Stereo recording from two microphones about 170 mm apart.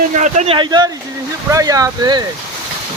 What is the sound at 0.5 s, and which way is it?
Speech, 25° right (ahead or behind).